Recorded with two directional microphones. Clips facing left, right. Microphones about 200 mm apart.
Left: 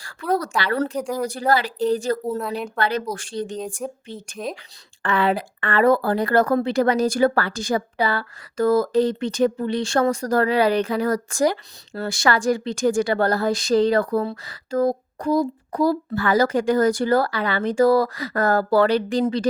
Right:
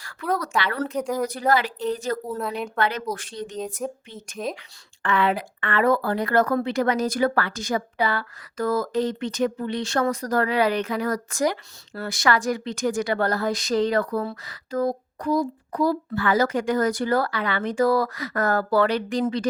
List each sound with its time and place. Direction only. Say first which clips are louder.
0.0 s a woman's voice: left 3 dB; 30° left (ahead or behind)
0.9 s speech: even; centre (ahead or behind)
1.2 s a woman's voice: left 2 dB; 30° left (ahead or behind)
2.4 s speech: left 1 dB; centre (ahead or behind)
2.7 s a woman's voice: left 2 dB; 35° left (ahead or behind)
3.8 s speech: left 1 dB; centre (ahead or behind)
5.0 s a woman's voice: left 2 dB; 35° left (ahead or behind)